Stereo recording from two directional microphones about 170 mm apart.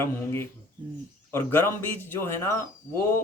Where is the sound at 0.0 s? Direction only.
15° left (ahead or behind).